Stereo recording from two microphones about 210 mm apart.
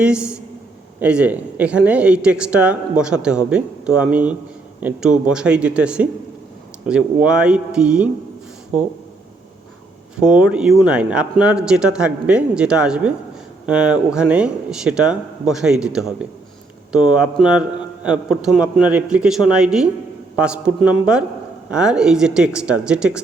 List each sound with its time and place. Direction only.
0.0 s speech: 5° right (ahead or behind)
10.2 s speech: 5° right (ahead or behind)